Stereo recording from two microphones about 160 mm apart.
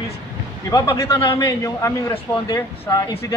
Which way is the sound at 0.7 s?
20° left (ahead or behind).